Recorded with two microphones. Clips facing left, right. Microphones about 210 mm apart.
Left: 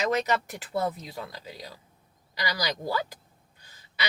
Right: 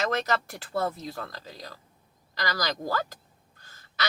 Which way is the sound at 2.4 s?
15° left (ahead or behind).